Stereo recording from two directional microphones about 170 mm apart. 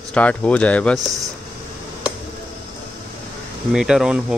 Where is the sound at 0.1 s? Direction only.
5° left (ahead or behind).